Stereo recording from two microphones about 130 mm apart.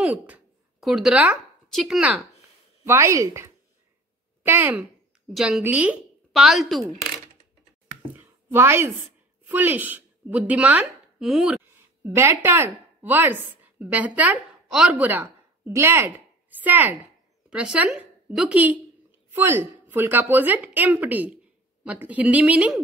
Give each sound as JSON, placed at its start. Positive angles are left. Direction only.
{"t": 0.0, "sound": "a sound", "side_deg": -10}
{"t": 0.8, "sound": "speech", "side_deg": 0}
{"t": 2.8, "sound": "a woman's voice", "side_deg": -20}
{"t": 5.3, "sound": "a woman's voice", "side_deg": 0}
{"t": 8.2, "sound": "a sound", "side_deg": -15}
{"t": 9.4, "sound": "a woman's voice", "side_deg": -15}
{"t": 12.0, "sound": "a woman's voice", "side_deg": -20}